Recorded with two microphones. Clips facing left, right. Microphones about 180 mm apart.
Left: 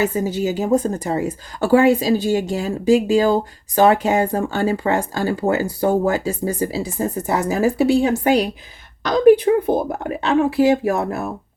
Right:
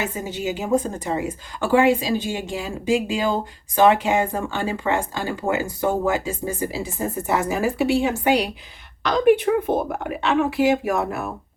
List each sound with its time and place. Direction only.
0.0 s a woman's voice: 40° left (ahead or behind)